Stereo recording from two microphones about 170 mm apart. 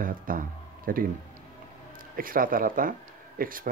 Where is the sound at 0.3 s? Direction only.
55° right (ahead or behind).